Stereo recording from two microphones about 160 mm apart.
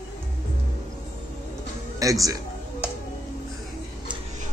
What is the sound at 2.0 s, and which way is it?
Speech, 20° right (ahead or behind).